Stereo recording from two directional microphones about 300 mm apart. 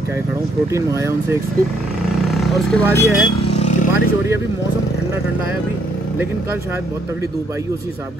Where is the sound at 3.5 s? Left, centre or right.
Left.